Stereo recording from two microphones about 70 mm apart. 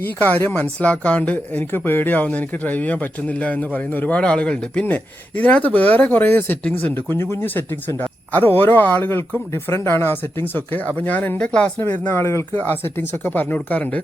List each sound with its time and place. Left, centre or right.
0.0 s speech: left
11.8 s speech: left